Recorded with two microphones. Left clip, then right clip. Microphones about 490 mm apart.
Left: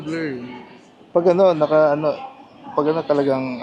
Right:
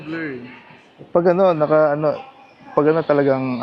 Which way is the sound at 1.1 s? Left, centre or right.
Right.